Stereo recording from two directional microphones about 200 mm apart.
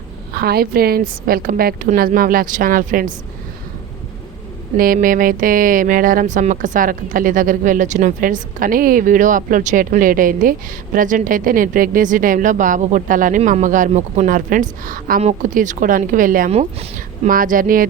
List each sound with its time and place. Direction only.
0.3 s speech: 50° right (ahead or behind)
4.8 s speech: 45° right (ahead or behind)